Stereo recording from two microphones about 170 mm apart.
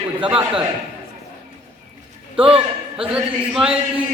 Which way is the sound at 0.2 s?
5° right (ahead or behind).